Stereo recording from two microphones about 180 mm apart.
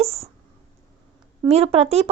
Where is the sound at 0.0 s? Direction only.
35° right (ahead or behind).